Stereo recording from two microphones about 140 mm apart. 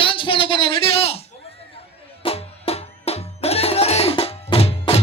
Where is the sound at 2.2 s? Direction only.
45° left (ahead or behind).